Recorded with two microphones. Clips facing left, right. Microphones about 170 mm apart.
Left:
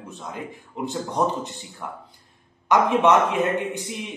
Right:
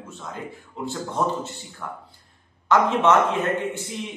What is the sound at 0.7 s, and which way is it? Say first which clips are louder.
Speech: left 2 dB; 15° left (ahead or behind).